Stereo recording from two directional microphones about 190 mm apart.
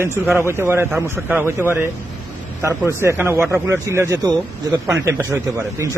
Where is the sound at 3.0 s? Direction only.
15° right (ahead or behind).